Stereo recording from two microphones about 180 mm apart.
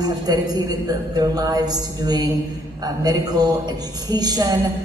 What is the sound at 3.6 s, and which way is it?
Speech, 20° right (ahead or behind).